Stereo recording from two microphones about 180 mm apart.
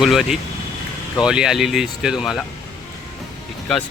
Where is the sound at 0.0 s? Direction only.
Centre (ahead or behind).